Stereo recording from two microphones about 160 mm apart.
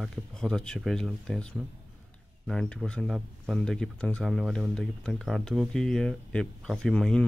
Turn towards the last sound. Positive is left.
turn(degrees=5)  # may be behind; listen again after turning